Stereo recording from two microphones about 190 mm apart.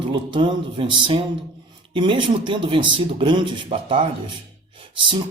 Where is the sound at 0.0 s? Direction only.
25° right (ahead or behind).